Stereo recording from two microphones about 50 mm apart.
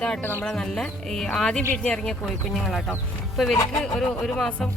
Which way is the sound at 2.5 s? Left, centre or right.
Centre.